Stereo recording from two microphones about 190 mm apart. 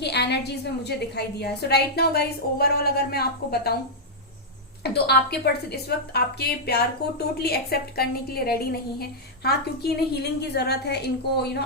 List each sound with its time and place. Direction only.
0.0 s a woman's voice: 60° left (ahead or behind)
4.8 s a woman's voice: 60° left (ahead or behind)